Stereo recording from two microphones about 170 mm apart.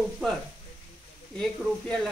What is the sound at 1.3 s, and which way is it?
Speech, centre (ahead or behind).